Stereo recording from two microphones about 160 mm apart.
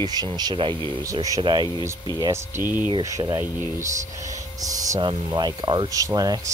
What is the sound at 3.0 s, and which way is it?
Speech, 20° right (ahead or behind).